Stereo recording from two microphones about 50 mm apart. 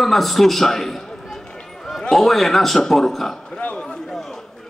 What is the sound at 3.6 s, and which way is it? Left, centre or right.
Speech, left.